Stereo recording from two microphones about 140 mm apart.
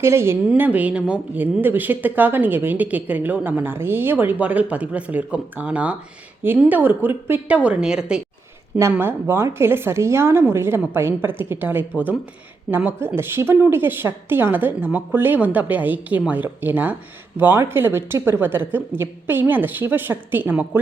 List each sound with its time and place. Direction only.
0.0 s speech: 20° right (ahead or behind)
8.9 s speech: 15° right (ahead or behind)